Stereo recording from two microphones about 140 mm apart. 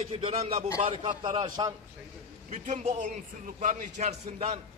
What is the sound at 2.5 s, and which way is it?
A man's voice, 60° right (ahead or behind).